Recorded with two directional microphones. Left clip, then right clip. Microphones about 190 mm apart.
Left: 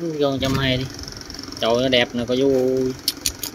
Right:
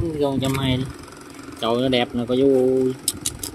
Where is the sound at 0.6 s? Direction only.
15° right (ahead or behind).